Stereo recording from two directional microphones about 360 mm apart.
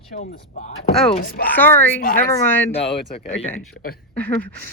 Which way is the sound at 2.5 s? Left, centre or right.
Centre.